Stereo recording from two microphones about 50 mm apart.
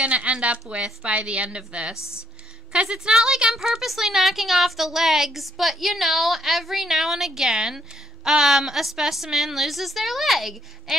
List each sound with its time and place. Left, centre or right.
0.0 s a woman's voice: right
2.0 s speech: left
2.7 s a woman's voice: centre